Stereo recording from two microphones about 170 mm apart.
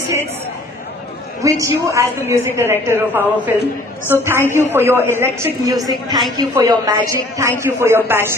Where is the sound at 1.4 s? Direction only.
20° right (ahead or behind).